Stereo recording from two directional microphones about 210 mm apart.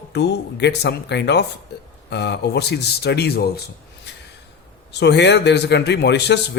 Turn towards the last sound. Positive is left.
turn(degrees=55)  # may be behind; listen again after turning